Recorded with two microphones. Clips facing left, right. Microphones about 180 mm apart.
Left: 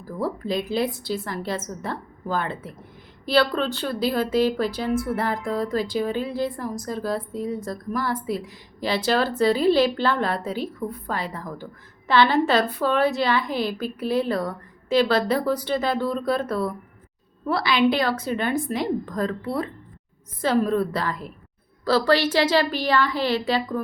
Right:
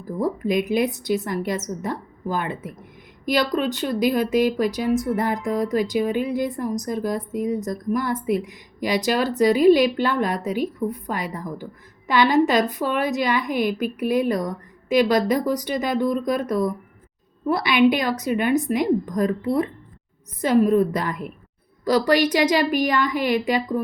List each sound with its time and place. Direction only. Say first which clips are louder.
0.2 s a woman's voice: right 4 dB; 15° right (ahead or behind)